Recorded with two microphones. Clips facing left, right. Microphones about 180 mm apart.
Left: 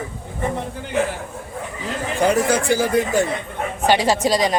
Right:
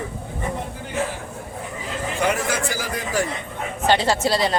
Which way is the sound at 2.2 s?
30° left (ahead or behind).